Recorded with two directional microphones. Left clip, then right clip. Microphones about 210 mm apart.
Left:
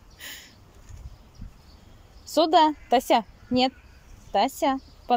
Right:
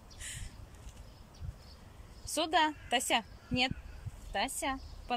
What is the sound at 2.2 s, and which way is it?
A woman's voice, 25° left (ahead or behind).